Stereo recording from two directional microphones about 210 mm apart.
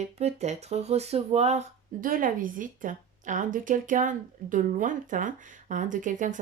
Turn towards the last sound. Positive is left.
turn(degrees=-35)  # may be behind; listen again after turning